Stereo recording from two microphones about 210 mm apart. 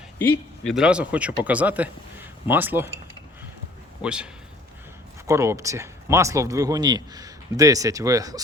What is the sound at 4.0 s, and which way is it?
Speech, 5° right (ahead or behind).